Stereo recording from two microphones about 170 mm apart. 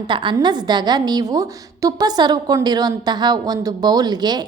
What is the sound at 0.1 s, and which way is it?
A woman's voice, 30° right (ahead or behind).